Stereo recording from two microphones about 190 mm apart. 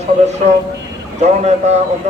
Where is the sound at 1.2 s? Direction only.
35° right (ahead or behind).